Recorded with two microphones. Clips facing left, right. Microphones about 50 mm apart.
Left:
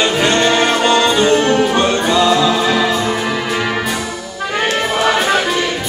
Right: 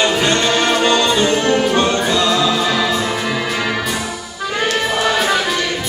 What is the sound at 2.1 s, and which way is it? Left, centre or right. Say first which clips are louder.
Music: left 3 dB; left.